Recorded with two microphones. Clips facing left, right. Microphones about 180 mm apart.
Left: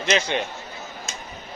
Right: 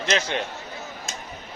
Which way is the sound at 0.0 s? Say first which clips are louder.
Left 2 dB; centre (ahead or behind).